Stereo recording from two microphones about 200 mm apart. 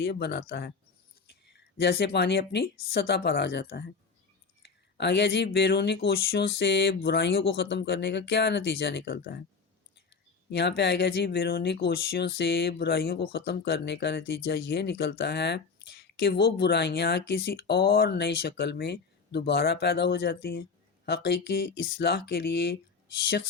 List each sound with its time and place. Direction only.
0.0 s speech: 55° left (ahead or behind)
10.5 s speech: 55° left (ahead or behind)